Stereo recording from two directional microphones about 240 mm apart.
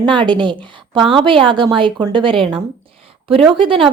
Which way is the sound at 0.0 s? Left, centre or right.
Centre.